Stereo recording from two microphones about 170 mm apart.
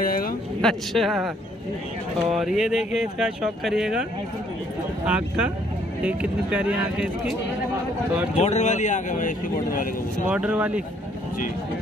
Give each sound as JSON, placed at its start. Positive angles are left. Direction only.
{"t": 0.0, "sound": "a sound", "side_deg": 60}
{"t": 0.6, "sound": "speech", "side_deg": 0}
{"t": 2.3, "sound": "speech", "side_deg": 0}
{"t": 5.0, "sound": "speech", "side_deg": -5}
{"t": 8.4, "sound": "speech", "side_deg": 40}
{"t": 10.2, "sound": "speech", "side_deg": -10}